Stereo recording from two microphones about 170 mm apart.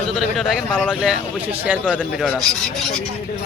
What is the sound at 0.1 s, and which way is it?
A man's voice, centre (ahead or behind).